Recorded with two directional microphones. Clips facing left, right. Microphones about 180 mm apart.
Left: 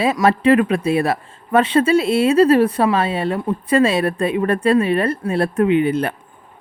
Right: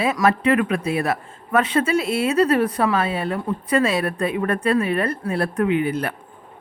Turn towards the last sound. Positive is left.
turn(degrees=25)  # may be behind; listen again after turning